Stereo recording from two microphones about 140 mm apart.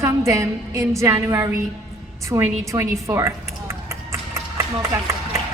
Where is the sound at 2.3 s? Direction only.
20° right (ahead or behind).